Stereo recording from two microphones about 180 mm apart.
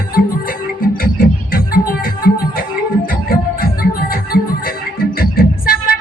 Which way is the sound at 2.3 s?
60° left (ahead or behind).